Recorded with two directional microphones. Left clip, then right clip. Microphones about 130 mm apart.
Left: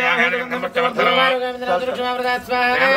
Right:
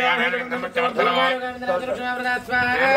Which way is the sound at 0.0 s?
5° right (ahead or behind).